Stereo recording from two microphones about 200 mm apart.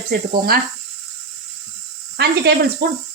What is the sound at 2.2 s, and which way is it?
Speech, 50° right (ahead or behind).